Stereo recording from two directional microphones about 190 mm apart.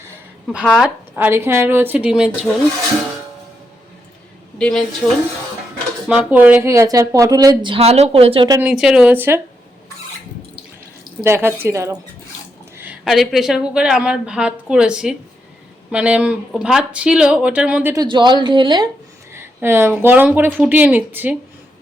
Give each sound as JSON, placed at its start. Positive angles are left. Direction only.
{"t": 0.6, "sound": "a woman's voice", "side_deg": -5}
{"t": 4.5, "sound": "a woman's voice", "side_deg": 5}
{"t": 6.1, "sound": "a woman's voice", "side_deg": -5}
{"t": 8.6, "sound": "a woman's voice", "side_deg": -5}
{"t": 11.2, "sound": "a woman's voice", "side_deg": -10}
{"t": 17.9, "sound": "a woman's voice", "side_deg": -20}
{"t": 19.3, "sound": "a woman's voice", "side_deg": -10}